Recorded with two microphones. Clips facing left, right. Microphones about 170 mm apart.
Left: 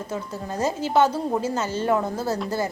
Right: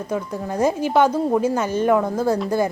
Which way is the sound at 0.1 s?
15° right (ahead or behind).